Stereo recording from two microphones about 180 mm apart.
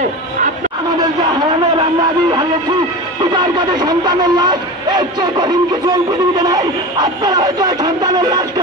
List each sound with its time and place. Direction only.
3.7 s speech: 25° right (ahead or behind)